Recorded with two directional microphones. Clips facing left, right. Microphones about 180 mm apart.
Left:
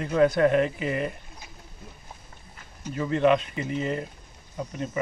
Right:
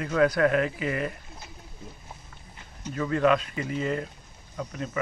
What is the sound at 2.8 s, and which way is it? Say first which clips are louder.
Speech: left 1 dB; 15° left (ahead or behind).